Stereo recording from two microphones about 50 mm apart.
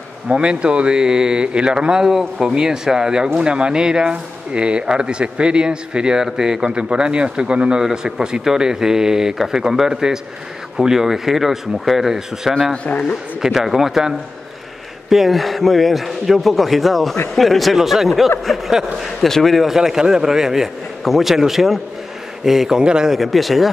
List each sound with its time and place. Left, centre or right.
0.3 s speech: right
7.8 s a man's voice: centre
12.7 s a man's voice: left
13.4 s a man's voice: centre
23.1 s a man's voice: centre